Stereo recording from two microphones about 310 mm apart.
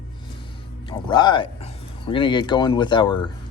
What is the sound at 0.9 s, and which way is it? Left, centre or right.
Speech, centre.